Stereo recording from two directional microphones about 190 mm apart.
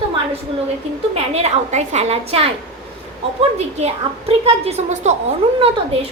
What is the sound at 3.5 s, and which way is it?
A woman's voice, 30° right (ahead or behind).